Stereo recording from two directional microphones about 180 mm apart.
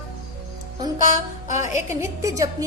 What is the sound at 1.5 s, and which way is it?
Speech, 40° left (ahead or behind).